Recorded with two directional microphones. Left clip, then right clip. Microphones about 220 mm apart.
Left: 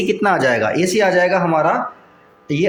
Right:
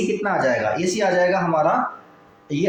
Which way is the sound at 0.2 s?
45° left (ahead or behind).